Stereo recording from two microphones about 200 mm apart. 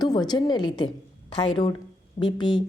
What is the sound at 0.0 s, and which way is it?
Speech, 20° left (ahead or behind).